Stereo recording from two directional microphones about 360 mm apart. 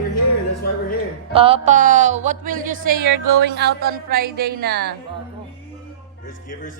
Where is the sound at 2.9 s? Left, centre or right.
Right.